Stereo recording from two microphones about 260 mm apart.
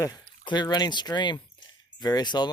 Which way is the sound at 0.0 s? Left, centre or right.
Centre.